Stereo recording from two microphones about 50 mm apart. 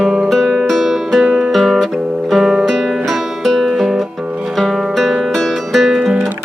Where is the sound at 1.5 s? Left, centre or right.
Centre.